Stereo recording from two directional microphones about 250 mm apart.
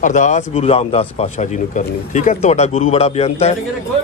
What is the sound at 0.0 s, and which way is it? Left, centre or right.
Speech, left.